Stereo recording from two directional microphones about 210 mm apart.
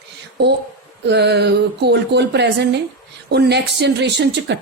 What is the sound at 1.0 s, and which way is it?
Speech, 55° right (ahead or behind).